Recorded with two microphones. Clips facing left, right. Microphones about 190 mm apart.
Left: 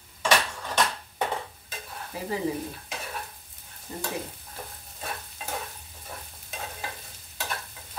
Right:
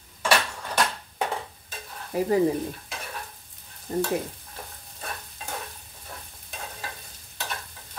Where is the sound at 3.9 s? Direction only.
45° right (ahead or behind).